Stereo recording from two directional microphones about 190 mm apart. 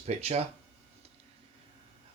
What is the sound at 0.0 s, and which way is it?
Speech, 35° right (ahead or behind).